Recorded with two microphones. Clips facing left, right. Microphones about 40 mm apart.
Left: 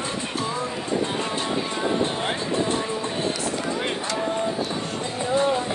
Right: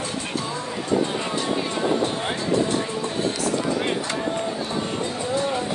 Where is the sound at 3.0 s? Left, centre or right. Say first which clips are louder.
Right 1 dB; left.